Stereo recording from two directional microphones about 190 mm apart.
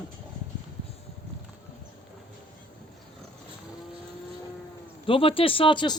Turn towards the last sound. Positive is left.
turn(degrees=25)  # may be behind; listen again after turning